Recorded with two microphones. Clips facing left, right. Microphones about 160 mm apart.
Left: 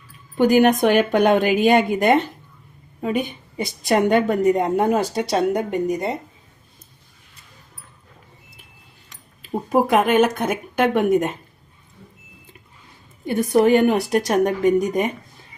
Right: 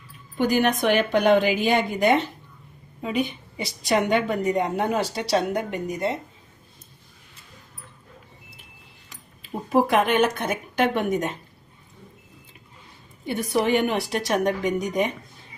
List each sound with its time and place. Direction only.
0.3 s a woman's voice: 50° left (ahead or behind)
9.9 s a woman's voice: 45° left (ahead or behind)
13.2 s a woman's voice: 50° left (ahead or behind)